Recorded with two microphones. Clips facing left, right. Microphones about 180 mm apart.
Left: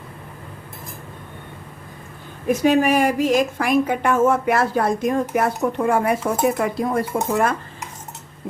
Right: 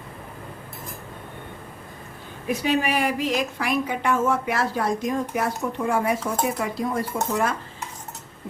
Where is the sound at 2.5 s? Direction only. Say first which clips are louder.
Left 7 dB; 45° left (ahead or behind).